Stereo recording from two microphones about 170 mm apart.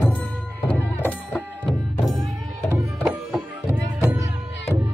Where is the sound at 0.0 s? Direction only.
10° left (ahead or behind).